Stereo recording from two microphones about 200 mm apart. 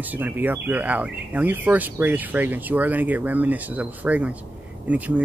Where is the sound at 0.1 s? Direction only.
10° right (ahead or behind).